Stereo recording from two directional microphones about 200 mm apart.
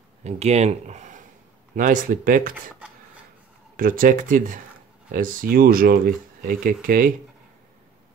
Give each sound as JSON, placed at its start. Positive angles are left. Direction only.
{"t": 0.2, "sound": "speech", "side_deg": -35}
{"t": 3.7, "sound": "speech", "side_deg": -45}